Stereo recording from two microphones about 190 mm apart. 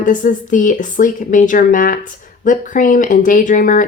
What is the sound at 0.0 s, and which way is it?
A woman's voice, 45° left (ahead or behind).